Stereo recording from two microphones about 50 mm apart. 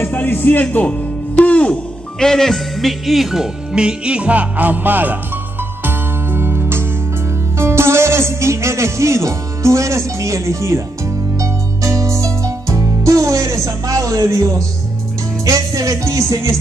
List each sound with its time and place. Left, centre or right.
0.0 s music: left
2.1 s speech: centre; by 5.2 s right
5.9 s music: right
7.5 s speech: right
11.3 s music: right
15.9 s music: right